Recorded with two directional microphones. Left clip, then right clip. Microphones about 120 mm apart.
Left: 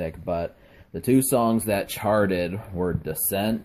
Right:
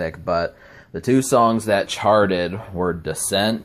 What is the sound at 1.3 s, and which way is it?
Speech, 20° left (ahead or behind).